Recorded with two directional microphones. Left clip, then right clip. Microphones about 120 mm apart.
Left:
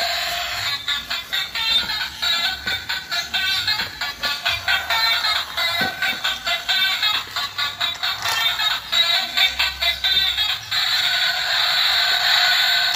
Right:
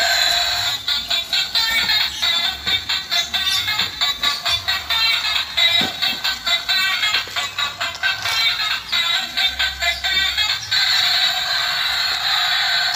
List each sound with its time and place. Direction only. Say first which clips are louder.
0.0 s music: right 6 dB; centre (ahead or behind)
1.8 s music: right 5 dB; 15° right (ahead or behind)
2.2 s music: right 2 dB; centre (ahead or behind)
4.8 s music: right 2 dB; 25° left (ahead or behind)
5.9 s music: right 1 dB; 10° right (ahead or behind)
6.8 s music: right 1 dB; 20° left (ahead or behind)
8.5 s music: right 1 dB; 90° left
9.6 s music: even; 35° left (ahead or behind)
11.4 s music: left 1 dB; 50° left (ahead or behind); by 12.4 s 75° left (ahead or behind)
12.4 s music: left 1 dB; 45° left (ahead or behind)